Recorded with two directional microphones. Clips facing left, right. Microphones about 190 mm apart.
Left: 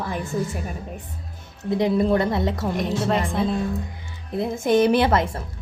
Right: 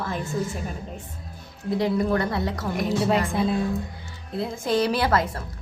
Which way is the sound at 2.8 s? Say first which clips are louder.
Right 3 dB; centre (ahead or behind).